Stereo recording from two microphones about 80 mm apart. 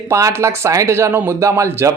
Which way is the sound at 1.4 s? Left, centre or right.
Right.